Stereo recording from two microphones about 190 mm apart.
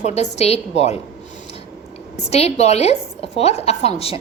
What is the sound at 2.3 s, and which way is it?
A woman's voice, 35° left (ahead or behind).